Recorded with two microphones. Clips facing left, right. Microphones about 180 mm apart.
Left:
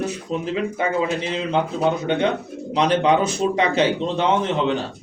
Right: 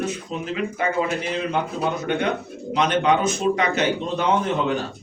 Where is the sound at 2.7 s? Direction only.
35° left (ahead or behind).